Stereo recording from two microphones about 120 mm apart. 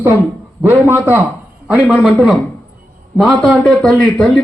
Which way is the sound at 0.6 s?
20° right (ahead or behind).